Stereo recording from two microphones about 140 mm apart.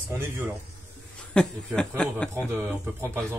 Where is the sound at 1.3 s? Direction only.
5° left (ahead or behind).